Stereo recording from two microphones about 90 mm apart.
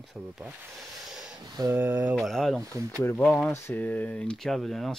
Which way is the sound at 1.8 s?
20° right (ahead or behind).